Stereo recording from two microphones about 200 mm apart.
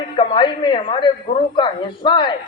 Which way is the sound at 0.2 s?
25° left (ahead or behind).